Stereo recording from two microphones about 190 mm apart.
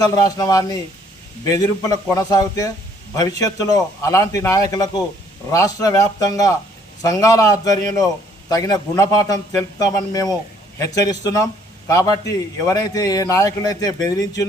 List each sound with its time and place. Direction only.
0.0 s a man's voice: 20° left (ahead or behind)